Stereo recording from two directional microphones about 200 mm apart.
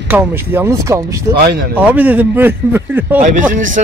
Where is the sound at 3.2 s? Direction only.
40° right (ahead or behind).